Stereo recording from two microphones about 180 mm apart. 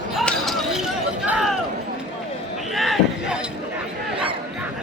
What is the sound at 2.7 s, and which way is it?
Basketball bounce, centre (ahead or behind).